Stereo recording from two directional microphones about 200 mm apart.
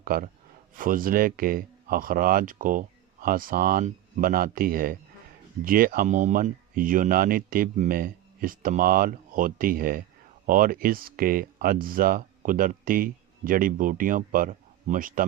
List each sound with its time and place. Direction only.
0.0 s speech: 45° right (ahead or behind)